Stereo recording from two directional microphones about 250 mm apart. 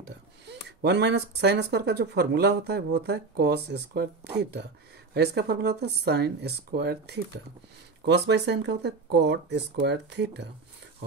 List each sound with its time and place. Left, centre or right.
0.5 s speech: right